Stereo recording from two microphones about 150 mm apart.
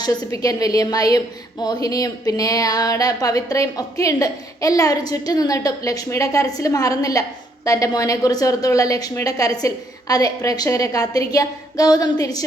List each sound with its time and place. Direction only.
0.0 s a woman's voice: 25° left (ahead or behind)